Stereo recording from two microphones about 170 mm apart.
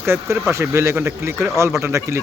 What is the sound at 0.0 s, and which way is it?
Speech, 15° right (ahead or behind).